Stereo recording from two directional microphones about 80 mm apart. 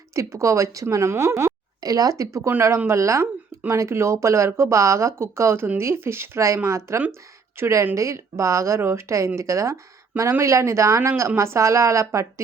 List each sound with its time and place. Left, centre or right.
0.2 s speech: right
1.8 s speech: right